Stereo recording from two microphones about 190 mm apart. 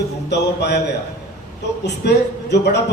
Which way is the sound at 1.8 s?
65° left (ahead or behind).